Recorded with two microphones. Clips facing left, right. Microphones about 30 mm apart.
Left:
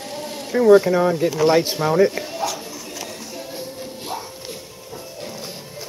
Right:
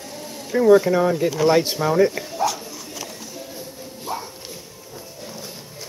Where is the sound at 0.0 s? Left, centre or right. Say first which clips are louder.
Left 4 dB; left.